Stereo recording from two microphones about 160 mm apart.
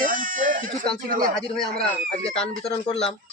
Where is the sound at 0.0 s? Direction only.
55° right (ahead or behind).